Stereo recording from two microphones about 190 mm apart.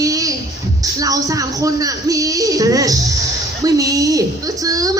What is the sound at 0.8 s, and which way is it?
A man's voice, 20° right (ahead or behind).